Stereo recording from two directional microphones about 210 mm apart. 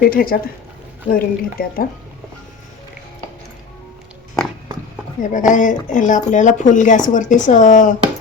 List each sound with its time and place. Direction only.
0.0 s speech: 45° left (ahead or behind)
5.2 s speech: 35° left (ahead or behind)